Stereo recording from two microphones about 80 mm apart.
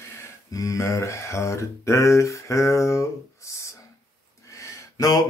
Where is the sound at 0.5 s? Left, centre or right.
Left.